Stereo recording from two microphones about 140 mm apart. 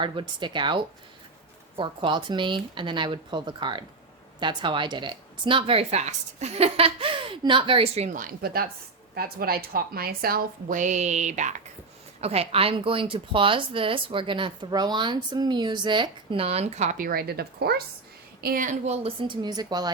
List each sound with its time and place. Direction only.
0.0 s a woman's voice: 35° right (ahead or behind); by 11.5 s 60° right (ahead or behind)
12.2 s speech: 45° right (ahead or behind)
17.0 s a woman's voice: 90° right
18.4 s a woman's voice: 75° right (ahead or behind)
19.0 s speech: 35° right (ahead or behind)